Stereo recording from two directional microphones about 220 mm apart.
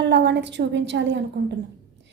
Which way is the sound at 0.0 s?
50° right (ahead or behind).